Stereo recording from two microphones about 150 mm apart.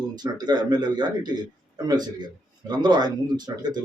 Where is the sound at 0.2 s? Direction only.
30° right (ahead or behind).